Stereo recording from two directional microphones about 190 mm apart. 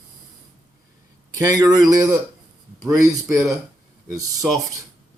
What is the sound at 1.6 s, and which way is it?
Speech, 20° right (ahead or behind).